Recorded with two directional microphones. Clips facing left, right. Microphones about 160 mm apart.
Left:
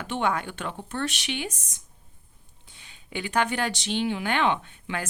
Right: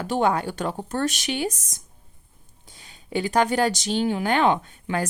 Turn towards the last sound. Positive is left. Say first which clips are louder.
# right 6 dB
turn(degrees=-40)  # may be behind; listen again after turning